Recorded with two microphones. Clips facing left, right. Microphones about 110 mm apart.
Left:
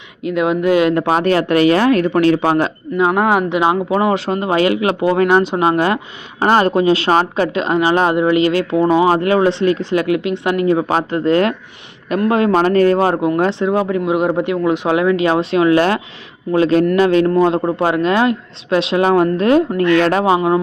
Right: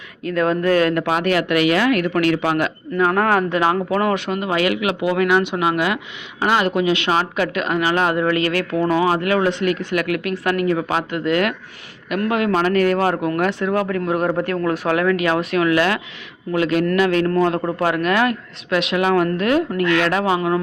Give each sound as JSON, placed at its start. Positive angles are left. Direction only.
{"t": 0.2, "sound": "speech", "side_deg": 15}
{"t": 3.1, "sound": "speech", "side_deg": 15}